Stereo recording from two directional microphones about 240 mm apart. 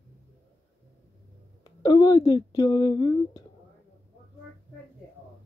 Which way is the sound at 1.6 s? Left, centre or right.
Centre.